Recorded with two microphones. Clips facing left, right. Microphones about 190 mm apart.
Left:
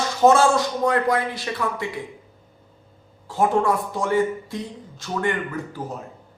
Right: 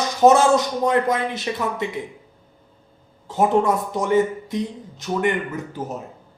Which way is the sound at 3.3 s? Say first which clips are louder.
Right 2 dB; 20° right (ahead or behind).